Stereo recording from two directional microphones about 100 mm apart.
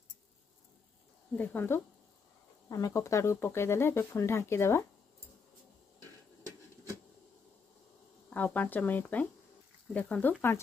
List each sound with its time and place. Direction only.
1.3 s speech: 20° left (ahead or behind)
2.7 s speech: 35° left (ahead or behind)
8.5 s speech: 15° left (ahead or behind)